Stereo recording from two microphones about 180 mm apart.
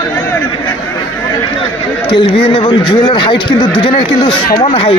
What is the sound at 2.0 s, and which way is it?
Speech, 30° left (ahead or behind).